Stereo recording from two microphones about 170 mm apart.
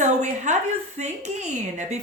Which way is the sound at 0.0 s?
45° right (ahead or behind).